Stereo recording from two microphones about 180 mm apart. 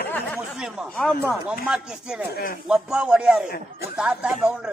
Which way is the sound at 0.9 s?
Centre (ahead or behind).